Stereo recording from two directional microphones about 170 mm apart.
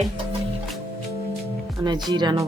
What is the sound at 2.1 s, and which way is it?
Speech, 25° right (ahead or behind).